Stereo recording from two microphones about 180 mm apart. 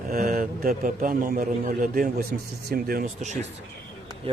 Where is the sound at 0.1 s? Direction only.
55° right (ahead or behind).